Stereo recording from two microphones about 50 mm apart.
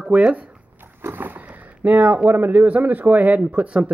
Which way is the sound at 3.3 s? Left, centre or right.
Right.